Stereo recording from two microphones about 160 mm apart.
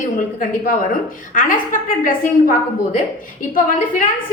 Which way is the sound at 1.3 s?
55° left (ahead or behind).